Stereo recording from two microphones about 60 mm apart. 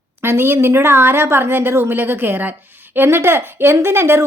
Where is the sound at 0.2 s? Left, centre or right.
Right.